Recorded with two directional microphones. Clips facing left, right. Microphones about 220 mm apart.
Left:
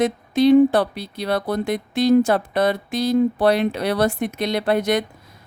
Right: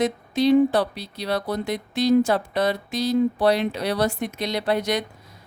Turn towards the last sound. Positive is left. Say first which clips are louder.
# left 4 dB
turn(degrees=55)  # may be behind; listen again after turning